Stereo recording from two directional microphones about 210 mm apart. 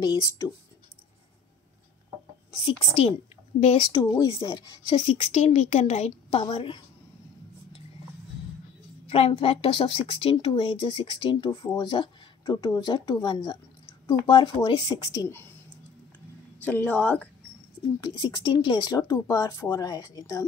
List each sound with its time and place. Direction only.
0.0 s speech: 20° left (ahead or behind)
2.6 s speech: 25° left (ahead or behind)
3.9 s speech: 15° left (ahead or behind)
9.1 s speech: 30° left (ahead or behind)
16.6 s a woman's voice: 5° left (ahead or behind)
18.0 s speech: 20° left (ahead or behind)